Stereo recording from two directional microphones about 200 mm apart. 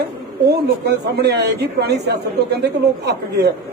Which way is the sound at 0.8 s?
55° right (ahead or behind).